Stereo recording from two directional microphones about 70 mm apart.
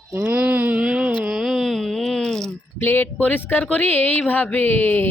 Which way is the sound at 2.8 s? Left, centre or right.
Left.